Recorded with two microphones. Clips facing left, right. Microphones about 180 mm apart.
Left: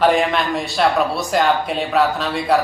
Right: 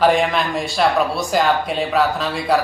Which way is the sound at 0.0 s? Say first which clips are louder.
Even; centre (ahead or behind).